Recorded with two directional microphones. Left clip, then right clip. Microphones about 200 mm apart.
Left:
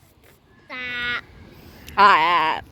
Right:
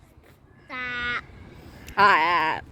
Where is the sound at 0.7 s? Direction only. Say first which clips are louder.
Left 2 dB; 40° right (ahead or behind).